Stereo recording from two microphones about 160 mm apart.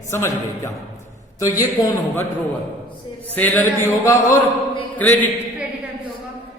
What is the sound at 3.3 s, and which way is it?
A man's voice, 10° left (ahead or behind).